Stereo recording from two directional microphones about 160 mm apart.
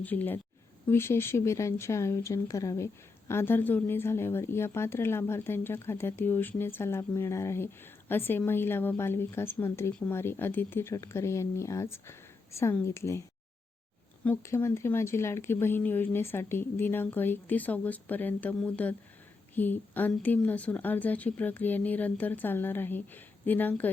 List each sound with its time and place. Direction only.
0.0 s speech: 10° left (ahead or behind)
14.3 s speech: 15° left (ahead or behind)